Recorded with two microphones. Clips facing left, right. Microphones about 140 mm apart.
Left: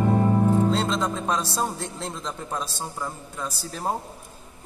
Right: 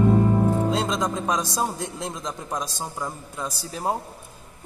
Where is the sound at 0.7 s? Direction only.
10° right (ahead or behind).